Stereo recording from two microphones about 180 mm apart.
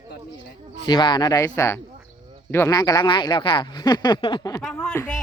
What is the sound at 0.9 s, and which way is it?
Speech, 25° left (ahead or behind).